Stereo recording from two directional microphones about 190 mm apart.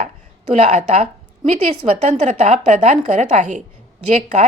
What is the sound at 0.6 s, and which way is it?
A woman's voice, 35° right (ahead or behind).